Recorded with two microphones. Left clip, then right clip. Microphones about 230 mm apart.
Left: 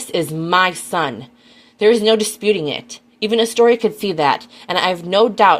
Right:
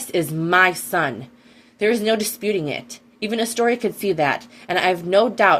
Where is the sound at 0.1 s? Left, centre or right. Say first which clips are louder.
Left 2 dB; left.